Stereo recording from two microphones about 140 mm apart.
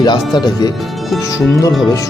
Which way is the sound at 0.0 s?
30° left (ahead or behind).